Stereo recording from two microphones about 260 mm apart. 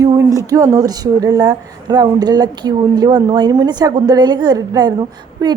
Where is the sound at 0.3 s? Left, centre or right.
Centre.